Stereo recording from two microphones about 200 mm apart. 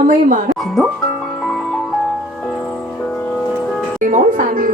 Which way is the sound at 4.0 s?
40° right (ahead or behind).